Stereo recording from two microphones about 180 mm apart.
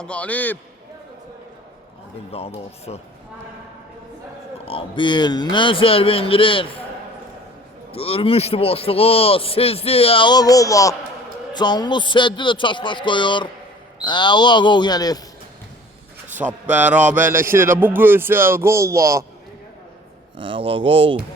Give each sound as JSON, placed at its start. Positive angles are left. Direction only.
{"t": 0.0, "sound": "a man's voice", "side_deg": 5}
{"t": 2.3, "sound": "a man's voice", "side_deg": 35}
{"t": 4.6, "sound": "speech", "side_deg": 30}
{"t": 7.9, "sound": "a man's voice", "side_deg": 35}
{"t": 16.6, "sound": "speech", "side_deg": -10}
{"t": 20.4, "sound": "speech", "side_deg": -30}